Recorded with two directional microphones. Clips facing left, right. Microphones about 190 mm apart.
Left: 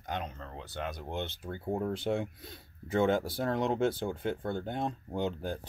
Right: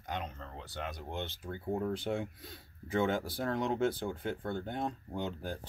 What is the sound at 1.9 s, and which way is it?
Speech, 25° left (ahead or behind).